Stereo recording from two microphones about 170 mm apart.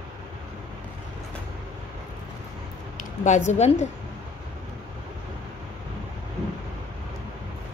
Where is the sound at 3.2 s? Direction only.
45° left (ahead or behind).